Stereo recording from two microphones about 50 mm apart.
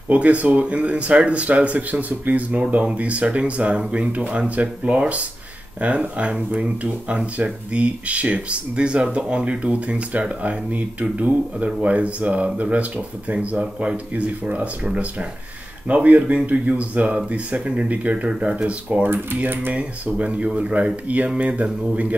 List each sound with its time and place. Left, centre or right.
0.1 s speech: right
19.0 s speech: right
19.7 s speech: right